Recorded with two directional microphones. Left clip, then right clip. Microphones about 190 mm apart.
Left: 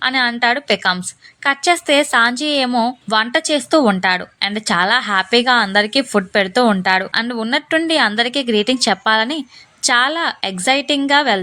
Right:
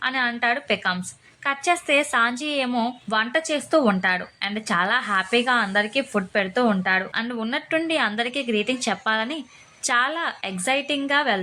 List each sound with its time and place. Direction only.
0.0 s a woman's voice: 30° left (ahead or behind)